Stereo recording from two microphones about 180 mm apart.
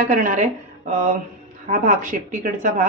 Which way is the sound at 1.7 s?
45° right (ahead or behind).